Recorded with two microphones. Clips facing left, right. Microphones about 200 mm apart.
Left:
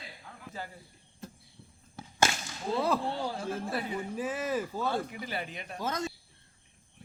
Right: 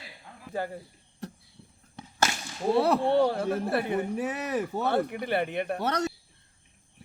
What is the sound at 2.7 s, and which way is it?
Speech, 65° right (ahead or behind).